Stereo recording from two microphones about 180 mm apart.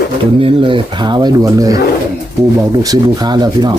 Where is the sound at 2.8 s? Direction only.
20° right (ahead or behind).